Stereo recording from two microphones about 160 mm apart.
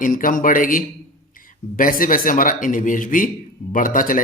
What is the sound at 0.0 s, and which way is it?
A man's voice, 55° left (ahead or behind).